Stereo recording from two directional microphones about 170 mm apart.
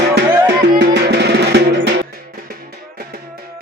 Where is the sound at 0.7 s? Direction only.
70° right (ahead or behind).